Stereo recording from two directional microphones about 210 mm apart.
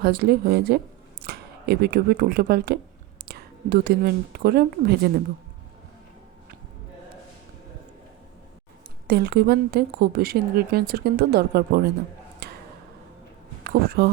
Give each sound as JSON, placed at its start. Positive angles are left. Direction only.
{"t": 0.0, "sound": "a woman's voice", "side_deg": -50}
{"t": 9.0, "sound": "a woman's voice", "side_deg": -50}
{"t": 12.4, "sound": "a sound", "side_deg": -45}
{"t": 13.7, "sound": "speech", "side_deg": -50}